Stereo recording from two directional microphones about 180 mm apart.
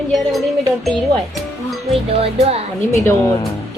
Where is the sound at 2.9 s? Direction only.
15° left (ahead or behind).